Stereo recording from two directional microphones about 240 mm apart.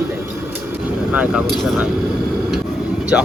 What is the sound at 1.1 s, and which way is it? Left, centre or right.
Speech, centre.